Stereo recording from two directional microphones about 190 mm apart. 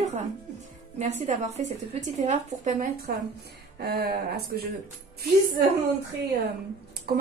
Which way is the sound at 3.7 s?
55° right (ahead or behind).